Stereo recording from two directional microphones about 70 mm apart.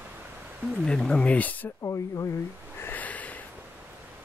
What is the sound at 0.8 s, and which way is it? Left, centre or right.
Speech, centre.